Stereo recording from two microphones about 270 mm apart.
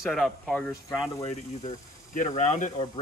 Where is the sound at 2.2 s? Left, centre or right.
Left.